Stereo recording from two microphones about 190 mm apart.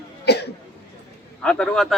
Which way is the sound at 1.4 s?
5° left (ahead or behind).